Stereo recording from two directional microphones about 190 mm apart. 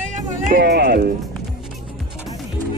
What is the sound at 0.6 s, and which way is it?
Music, 60° right (ahead or behind).